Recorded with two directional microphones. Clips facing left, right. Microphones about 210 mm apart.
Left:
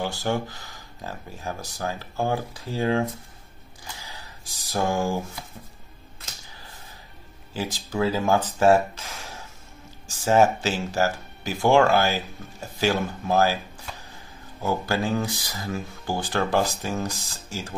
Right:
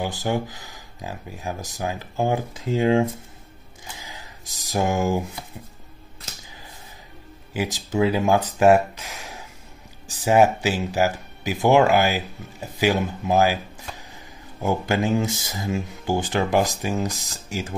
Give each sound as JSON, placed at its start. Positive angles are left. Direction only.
{"t": 0.0, "sound": "speech", "side_deg": -15}
{"t": 4.7, "sound": "speech", "side_deg": -20}
{"t": 7.7, "sound": "speech", "side_deg": -15}
{"t": 8.5, "sound": "a sound", "side_deg": -10}
{"t": 10.2, "sound": "speech", "side_deg": -15}
{"t": 14.6, "sound": "speech", "side_deg": -20}